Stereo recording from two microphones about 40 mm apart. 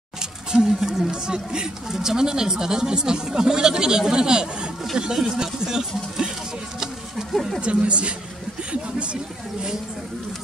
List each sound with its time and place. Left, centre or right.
0.5 s speech: centre
7.3 s speech: centre
7.6 s speech: right